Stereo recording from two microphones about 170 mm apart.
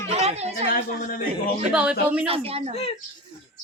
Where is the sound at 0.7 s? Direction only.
55° left (ahead or behind).